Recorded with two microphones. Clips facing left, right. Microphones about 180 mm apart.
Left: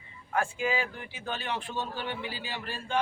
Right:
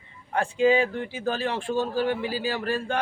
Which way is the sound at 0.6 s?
30° right (ahead or behind).